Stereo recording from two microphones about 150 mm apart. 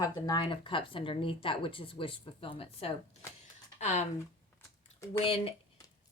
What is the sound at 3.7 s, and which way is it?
Speech, 50° left (ahead or behind).